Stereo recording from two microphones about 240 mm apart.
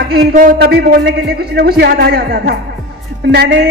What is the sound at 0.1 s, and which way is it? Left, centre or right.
A woman's voice, right.